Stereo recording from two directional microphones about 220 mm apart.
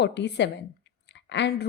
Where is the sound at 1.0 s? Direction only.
50° left (ahead or behind).